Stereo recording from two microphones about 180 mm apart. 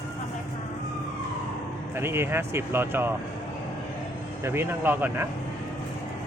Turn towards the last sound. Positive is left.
turn(degrees=-10)  # may be behind; listen again after turning